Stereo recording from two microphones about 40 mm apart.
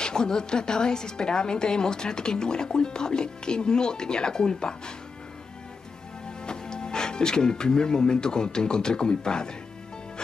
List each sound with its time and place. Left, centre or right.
0.0 s a woman's voice: centre
6.4 s speech: centre